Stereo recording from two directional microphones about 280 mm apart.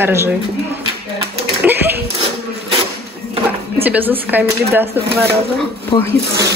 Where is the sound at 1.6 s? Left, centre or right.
Centre.